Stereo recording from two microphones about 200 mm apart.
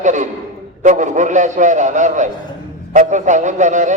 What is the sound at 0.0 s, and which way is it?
A man's voice, 40° right (ahead or behind).